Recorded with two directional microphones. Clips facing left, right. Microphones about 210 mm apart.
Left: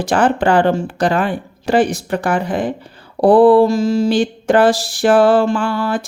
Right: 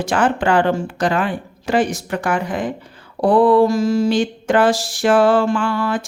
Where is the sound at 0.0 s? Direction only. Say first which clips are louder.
Left 3 dB; 35° left (ahead or behind).